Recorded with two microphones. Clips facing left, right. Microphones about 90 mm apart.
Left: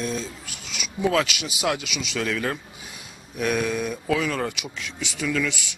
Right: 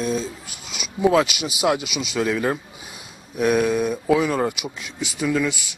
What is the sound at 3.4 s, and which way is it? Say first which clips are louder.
Speech: right 5 dB; 5° right (ahead or behind).